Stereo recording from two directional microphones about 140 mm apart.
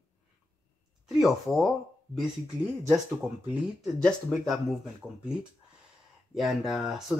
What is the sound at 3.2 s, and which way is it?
Speech, centre (ahead or behind).